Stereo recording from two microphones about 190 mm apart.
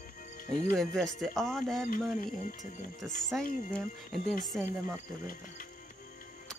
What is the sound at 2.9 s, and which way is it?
Speech, centre (ahead or behind).